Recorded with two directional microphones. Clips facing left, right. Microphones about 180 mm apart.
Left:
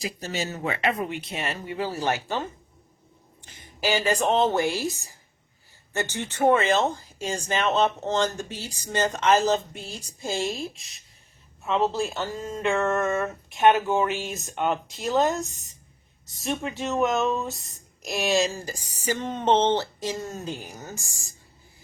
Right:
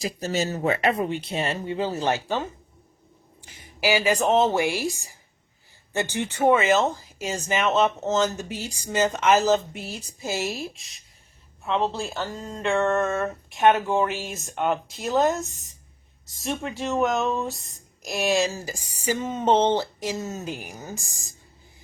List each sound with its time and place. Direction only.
0.0 s speech: 40° right (ahead or behind); by 2.1 s 20° right (ahead or behind)
3.8 s speech: 10° right (ahead or behind)